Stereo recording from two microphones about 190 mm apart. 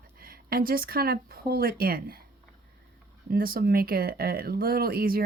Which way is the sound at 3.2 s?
50° right (ahead or behind).